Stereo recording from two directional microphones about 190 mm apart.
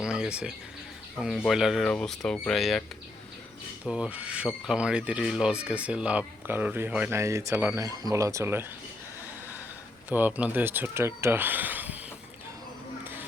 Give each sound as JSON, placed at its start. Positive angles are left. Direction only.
{"t": 0.0, "sound": "a sound", "side_deg": -5}
{"t": 1.2, "sound": "speech", "side_deg": 0}
{"t": 3.8, "sound": "speech", "side_deg": -5}
{"t": 10.1, "sound": "speech", "side_deg": -10}